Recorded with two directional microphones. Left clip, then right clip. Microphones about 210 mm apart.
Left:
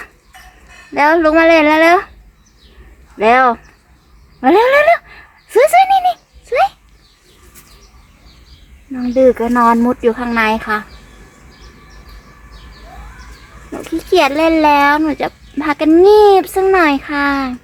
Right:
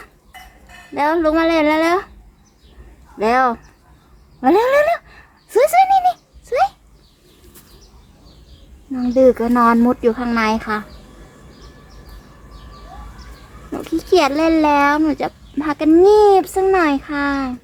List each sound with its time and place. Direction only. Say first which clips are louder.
0.9 s speech: left 6 dB; 20° left (ahead or behind)
3.2 s speech: left 5 dB; 10° left (ahead or behind)
4.4 s a sound: left 4 dB; 5° left (ahead or behind)
8.9 s speech: left 2 dB; centre (ahead or behind)
13.7 s speech: left 1 dB; 10° right (ahead or behind)